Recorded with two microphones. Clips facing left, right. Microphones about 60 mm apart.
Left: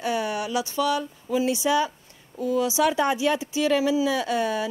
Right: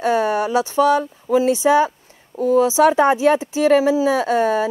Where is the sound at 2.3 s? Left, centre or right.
Right.